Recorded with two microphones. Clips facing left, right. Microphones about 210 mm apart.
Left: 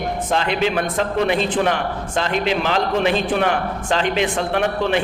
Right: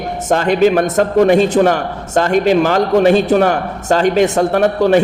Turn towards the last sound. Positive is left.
turn(degrees=-45)  # may be behind; listen again after turning